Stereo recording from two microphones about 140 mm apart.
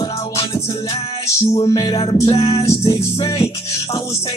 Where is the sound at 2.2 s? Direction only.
45° left (ahead or behind).